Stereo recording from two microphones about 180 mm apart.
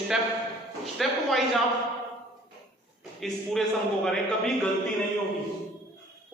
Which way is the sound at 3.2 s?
Centre (ahead or behind).